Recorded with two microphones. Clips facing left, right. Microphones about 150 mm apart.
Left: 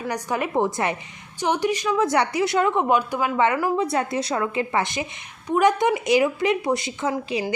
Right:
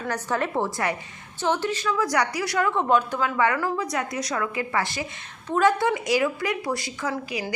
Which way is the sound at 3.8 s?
30° left (ahead or behind).